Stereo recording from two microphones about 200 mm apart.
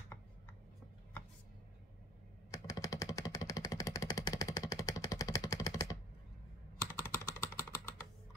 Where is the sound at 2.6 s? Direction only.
15° left (ahead or behind).